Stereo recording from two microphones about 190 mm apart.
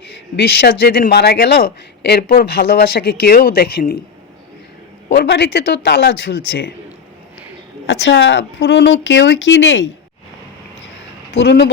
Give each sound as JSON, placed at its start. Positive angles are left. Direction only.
{"t": 0.1, "sound": "a man's voice", "side_deg": 60}
{"t": 5.0, "sound": "a man's voice", "side_deg": 60}
{"t": 7.9, "sound": "speech", "side_deg": 70}
{"t": 11.4, "sound": "a man's voice", "side_deg": 60}